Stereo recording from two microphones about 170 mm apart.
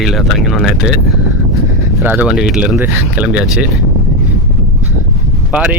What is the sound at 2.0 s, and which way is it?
Speech, 10° right (ahead or behind).